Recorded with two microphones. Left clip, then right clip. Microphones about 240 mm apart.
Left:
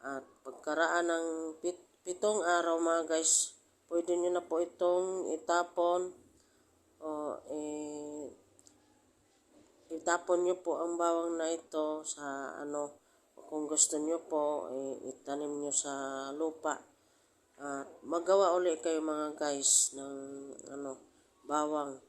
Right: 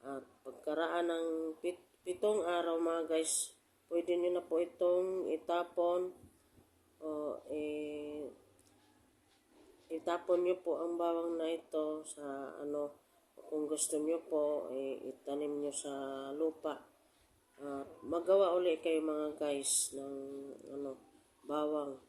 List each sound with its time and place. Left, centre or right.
0.0 s speech: centre
7.0 s mantra: centre
10.0 s a man's voice: centre